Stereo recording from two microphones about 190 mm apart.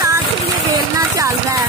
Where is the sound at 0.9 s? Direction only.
15° right (ahead or behind).